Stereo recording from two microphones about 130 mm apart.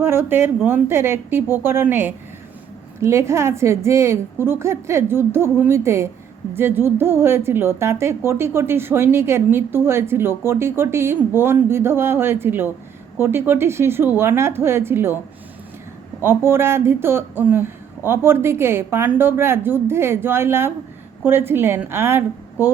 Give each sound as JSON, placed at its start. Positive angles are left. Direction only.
{"t": 0.0, "sound": "a woman's voice", "side_deg": -20}
{"t": 16.2, "sound": "a woman's voice", "side_deg": -15}